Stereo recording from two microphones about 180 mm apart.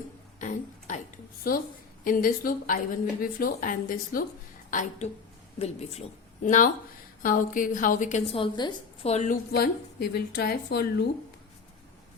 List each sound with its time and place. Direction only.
0.3 s a sound: 45° left (ahead or behind)
1.5 s a woman's voice: 50° left (ahead or behind)
8.4 s a woman's voice: 25° left (ahead or behind)
9.1 s a woman's voice: 40° left (ahead or behind)
9.5 s speech: 60° left (ahead or behind)